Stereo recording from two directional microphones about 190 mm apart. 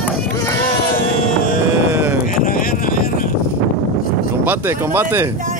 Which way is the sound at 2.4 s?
50° left (ahead or behind).